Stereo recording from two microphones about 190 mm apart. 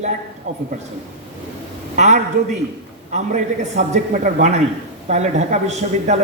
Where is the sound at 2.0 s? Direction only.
40° right (ahead or behind).